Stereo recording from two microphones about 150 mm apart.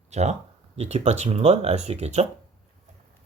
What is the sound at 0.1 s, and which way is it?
Speech, 50° right (ahead or behind).